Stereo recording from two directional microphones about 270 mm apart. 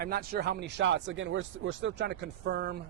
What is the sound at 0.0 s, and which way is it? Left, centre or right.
Speech, right.